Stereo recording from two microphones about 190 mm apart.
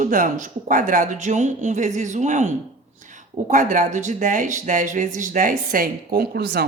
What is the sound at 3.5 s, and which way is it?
Speech, 45° right (ahead or behind).